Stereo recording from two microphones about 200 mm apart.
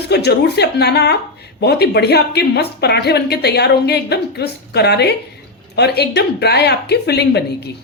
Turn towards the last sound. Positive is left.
turn(degrees=55)  # may be behind; listen again after turning